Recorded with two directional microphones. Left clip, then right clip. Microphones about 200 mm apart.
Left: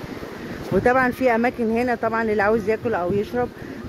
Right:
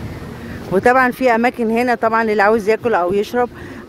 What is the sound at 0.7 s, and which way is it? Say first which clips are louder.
Speech: right 6 dB; 25° right (ahead or behind).